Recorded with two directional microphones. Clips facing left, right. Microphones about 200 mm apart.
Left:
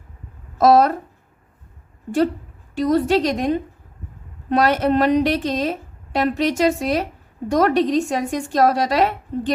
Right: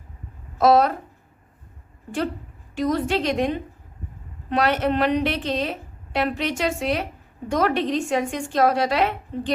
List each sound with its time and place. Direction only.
0.6 s a woman's voice: 40° left (ahead or behind)
2.7 s a woman's voice: 35° left (ahead or behind)